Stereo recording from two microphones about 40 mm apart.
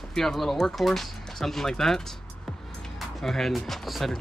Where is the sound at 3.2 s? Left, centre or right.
Centre.